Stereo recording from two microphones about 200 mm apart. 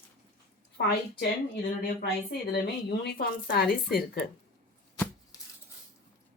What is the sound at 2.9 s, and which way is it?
Speech, 55° left (ahead or behind).